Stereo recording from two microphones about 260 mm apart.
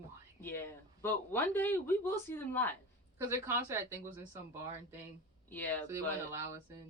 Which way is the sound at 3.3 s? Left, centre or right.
Centre.